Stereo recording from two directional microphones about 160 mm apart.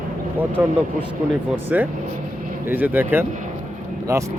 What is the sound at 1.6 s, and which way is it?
A man's voice, 10° right (ahead or behind).